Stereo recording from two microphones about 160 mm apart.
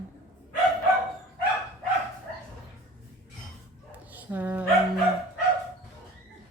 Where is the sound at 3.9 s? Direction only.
10° right (ahead or behind).